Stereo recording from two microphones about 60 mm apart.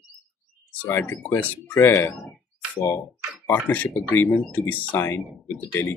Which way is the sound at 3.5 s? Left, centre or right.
Left.